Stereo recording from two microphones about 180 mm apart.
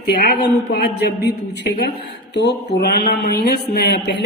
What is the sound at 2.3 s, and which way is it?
Speech, 70° left (ahead or behind).